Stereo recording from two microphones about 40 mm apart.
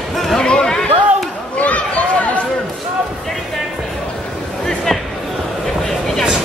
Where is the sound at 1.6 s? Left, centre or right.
Left.